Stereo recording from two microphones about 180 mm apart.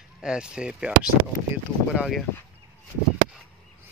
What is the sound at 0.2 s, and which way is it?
Speech, 5° right (ahead or behind).